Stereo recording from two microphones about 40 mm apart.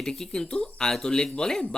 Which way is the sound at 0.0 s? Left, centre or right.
Centre.